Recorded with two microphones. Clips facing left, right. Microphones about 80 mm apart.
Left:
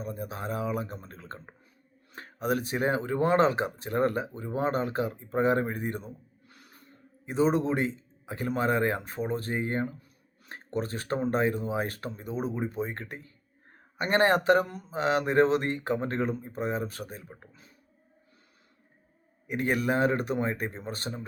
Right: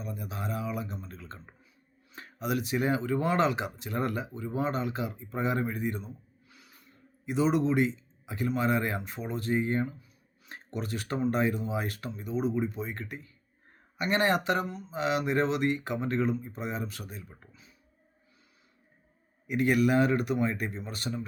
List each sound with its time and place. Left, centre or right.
0.0 s speech: left
19.5 s speech: left